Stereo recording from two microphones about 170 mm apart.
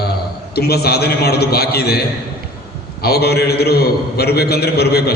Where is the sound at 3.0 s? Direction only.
70° left (ahead or behind).